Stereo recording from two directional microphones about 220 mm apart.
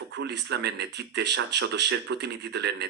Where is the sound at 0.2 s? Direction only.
50° right (ahead or behind).